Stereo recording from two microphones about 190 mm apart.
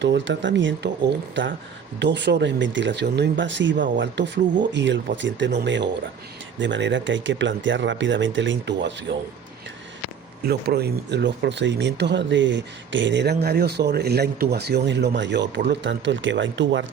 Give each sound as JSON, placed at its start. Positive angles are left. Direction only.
{"t": 0.0, "sound": "speech", "side_deg": -70}
{"t": 10.4, "sound": "speech", "side_deg": -55}